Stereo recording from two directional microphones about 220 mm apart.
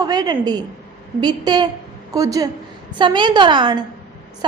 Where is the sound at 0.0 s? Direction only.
20° right (ahead or behind).